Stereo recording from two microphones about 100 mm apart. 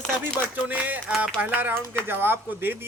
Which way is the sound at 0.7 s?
15° right (ahead or behind).